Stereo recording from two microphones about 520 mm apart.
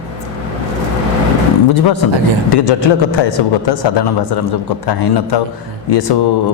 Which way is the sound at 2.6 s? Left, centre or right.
Left.